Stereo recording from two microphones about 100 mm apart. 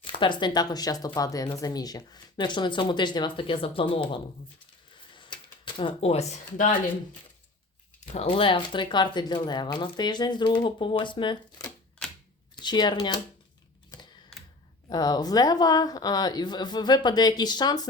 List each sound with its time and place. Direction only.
0.0 s speech: 55° left (ahead or behind)
5.1 s a sound: 55° left (ahead or behind)
6.0 s speech: 90° left
8.0 s speech: 90° left; by 11.3 s 55° left (ahead or behind)
12.5 s speech: 45° left (ahead or behind)
14.8 s speech: 40° left (ahead or behind)